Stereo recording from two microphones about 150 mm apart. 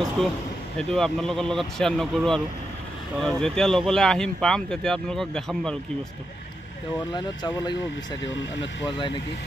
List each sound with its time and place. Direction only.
0.7 s speech: centre (ahead or behind)
7.2 s speech: 25° left (ahead or behind)